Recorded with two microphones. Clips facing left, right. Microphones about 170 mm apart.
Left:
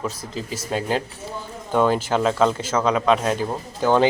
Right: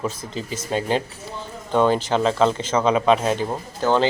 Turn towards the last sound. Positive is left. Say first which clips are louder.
# left 2 dB
turn(degrees=10)  # may be behind; listen again after turning